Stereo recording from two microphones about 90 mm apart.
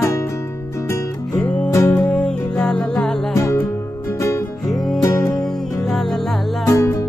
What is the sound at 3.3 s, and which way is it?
Music, 35° left (ahead or behind).